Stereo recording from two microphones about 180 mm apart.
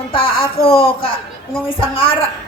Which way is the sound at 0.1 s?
30° left (ahead or behind).